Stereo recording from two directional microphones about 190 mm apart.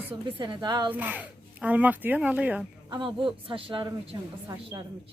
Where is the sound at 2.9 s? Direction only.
25° right (ahead or behind).